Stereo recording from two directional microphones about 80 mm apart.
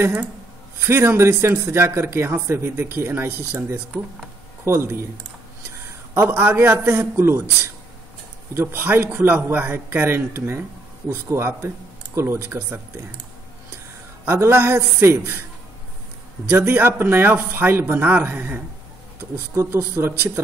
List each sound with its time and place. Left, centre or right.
0.7 s a man's voice: right
6.1 s a man's voice: right
8.5 s a man's voice: right
14.2 s a man's voice: right
16.4 s a man's voice: right